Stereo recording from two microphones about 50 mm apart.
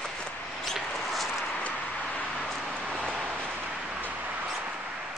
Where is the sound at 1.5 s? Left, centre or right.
Left.